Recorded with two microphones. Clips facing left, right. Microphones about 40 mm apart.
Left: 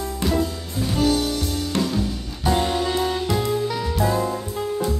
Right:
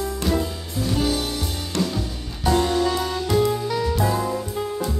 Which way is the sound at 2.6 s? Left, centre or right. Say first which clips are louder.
Right 2 dB; centre.